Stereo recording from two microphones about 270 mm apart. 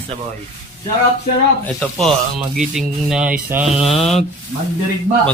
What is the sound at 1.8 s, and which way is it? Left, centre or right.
Speech, centre.